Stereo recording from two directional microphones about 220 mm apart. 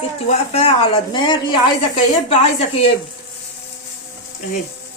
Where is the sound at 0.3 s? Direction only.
30° left (ahead or behind).